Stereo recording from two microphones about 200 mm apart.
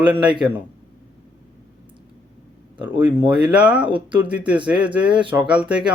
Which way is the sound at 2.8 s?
10° right (ahead or behind).